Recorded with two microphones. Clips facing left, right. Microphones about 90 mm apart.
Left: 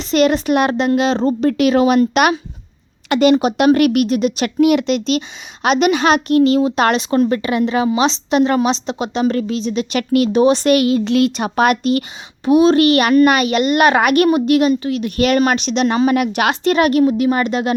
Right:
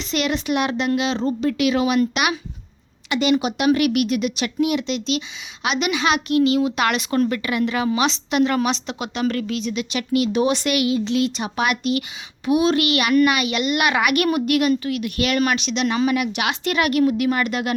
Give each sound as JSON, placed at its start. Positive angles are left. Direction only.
{"t": 0.0, "sound": "speech", "side_deg": 40}
{"t": 4.4, "sound": "a woman's voice", "side_deg": 60}
{"t": 9.9, "sound": "speech", "side_deg": 55}
{"t": 10.3, "sound": "speech", "side_deg": 35}
{"t": 14.3, "sound": "a woman's voice", "side_deg": 30}